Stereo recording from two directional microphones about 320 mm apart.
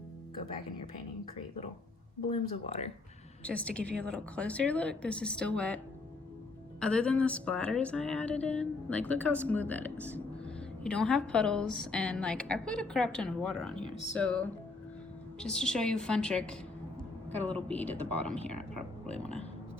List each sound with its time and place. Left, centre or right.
2.3 s speech: centre
3.4 s a woman's voice: centre